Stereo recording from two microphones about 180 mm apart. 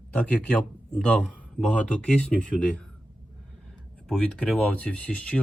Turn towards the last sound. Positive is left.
turn(degrees=5)  # may be behind; listen again after turning